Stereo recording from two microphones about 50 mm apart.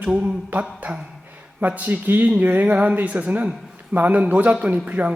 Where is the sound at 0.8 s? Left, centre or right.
Right.